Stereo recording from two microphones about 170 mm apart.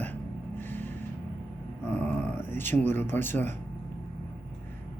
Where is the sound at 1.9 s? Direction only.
10° left (ahead or behind).